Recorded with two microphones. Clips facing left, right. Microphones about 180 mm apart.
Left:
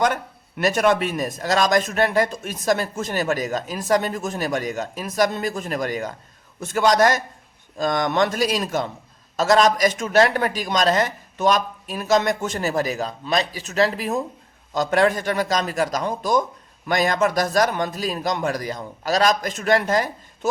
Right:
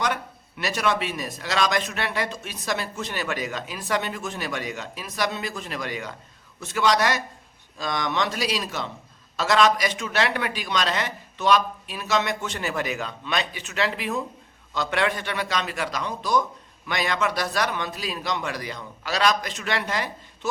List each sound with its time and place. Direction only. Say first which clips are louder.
0.0 s a man's voice: left 6 dB; 50° left (ahead or behind)